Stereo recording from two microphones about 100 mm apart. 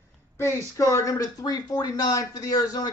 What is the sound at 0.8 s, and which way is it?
Speech, 35° left (ahead or behind).